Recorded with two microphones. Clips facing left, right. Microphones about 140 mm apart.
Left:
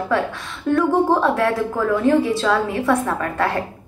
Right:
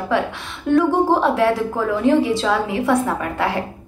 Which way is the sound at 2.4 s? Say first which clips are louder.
Even; 15° right (ahead or behind).